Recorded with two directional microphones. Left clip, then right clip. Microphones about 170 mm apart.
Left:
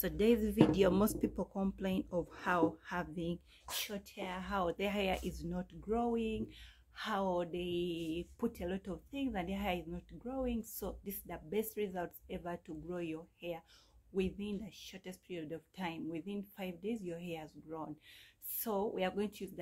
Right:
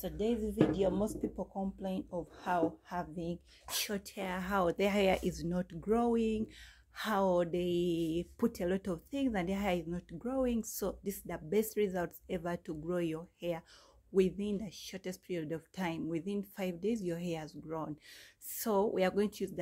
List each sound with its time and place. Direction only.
0.0 s speech: 35° left (ahead or behind)
2.3 s a woman's voice: 20° left (ahead or behind)
3.7 s speech: 40° right (ahead or behind)